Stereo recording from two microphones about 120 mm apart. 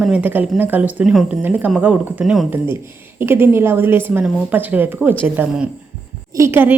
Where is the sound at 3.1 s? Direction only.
20° right (ahead or behind).